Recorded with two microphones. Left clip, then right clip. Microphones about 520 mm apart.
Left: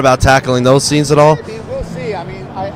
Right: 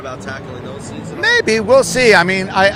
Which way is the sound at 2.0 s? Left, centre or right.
Right.